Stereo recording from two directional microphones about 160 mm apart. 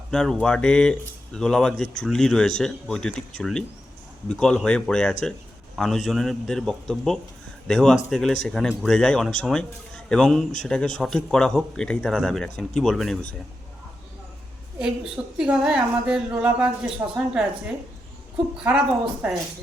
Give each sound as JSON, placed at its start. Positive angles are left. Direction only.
{"t": 0.1, "sound": "speech", "side_deg": 5}
{"t": 14.8, "sound": "speech", "side_deg": -5}
{"t": 17.0, "sound": "speech", "side_deg": -20}
{"t": 18.5, "sound": "speech", "side_deg": -5}